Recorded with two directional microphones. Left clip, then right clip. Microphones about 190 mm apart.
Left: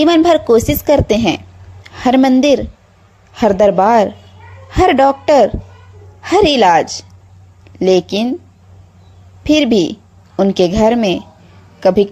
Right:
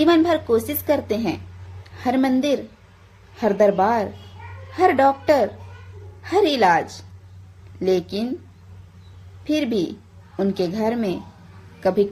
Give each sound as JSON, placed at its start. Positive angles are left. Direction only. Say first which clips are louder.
{"t": 0.0, "sound": "a woman's voice", "louder": "left 7 dB", "side_deg": 40}
{"t": 9.4, "sound": "a woman's voice", "louder": "left 10 dB", "side_deg": 40}